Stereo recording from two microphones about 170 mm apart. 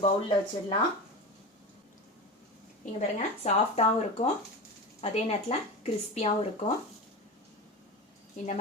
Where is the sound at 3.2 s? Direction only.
40° left (ahead or behind).